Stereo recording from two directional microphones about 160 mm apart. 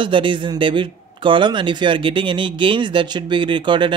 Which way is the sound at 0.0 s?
30° right (ahead or behind).